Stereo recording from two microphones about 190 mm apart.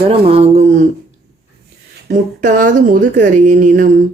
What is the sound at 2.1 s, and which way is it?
Speech, 45° right (ahead or behind).